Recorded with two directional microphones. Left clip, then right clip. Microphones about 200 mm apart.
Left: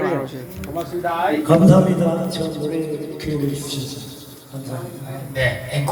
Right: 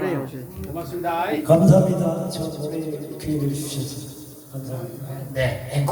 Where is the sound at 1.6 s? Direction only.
35° right (ahead or behind).